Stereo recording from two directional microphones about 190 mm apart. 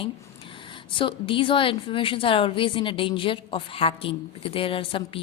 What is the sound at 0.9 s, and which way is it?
A woman's voice, 25° left (ahead or behind).